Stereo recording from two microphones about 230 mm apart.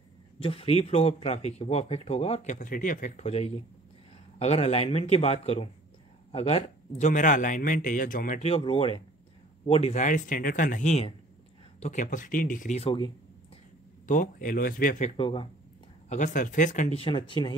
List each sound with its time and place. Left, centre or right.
0.4 s speech: left
14.0 s speech: left
16.1 s speech: left